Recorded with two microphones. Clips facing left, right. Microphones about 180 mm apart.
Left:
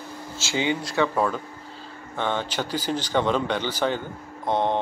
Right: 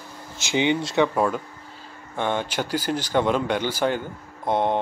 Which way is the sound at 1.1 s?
10° right (ahead or behind).